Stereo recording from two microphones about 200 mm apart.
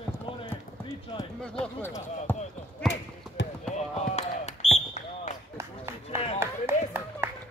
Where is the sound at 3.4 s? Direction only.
65° left (ahead or behind).